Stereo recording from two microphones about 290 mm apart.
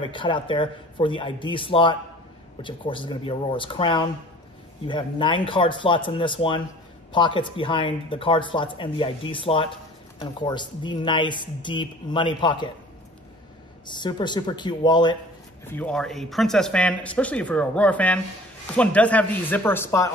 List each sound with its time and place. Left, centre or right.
0.0 s speech: centre
13.8 s speech: centre
15.7 s speech: centre